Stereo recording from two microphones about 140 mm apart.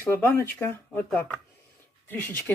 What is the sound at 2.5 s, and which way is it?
Speech, 15° left (ahead or behind).